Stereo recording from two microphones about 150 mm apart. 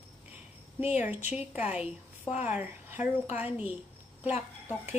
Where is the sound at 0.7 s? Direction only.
10° right (ahead or behind).